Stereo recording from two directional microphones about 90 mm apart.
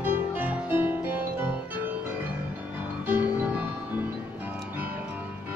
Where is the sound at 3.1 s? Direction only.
15° right (ahead or behind).